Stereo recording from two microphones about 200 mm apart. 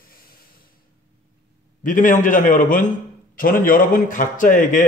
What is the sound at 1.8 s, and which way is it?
A man's voice, 40° left (ahead or behind).